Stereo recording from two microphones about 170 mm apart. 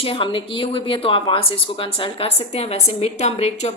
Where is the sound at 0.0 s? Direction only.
30° left (ahead or behind).